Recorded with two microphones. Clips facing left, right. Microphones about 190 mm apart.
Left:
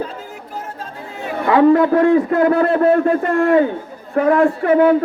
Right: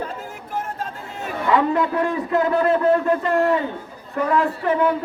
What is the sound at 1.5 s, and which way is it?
A man's voice, 55° left (ahead or behind).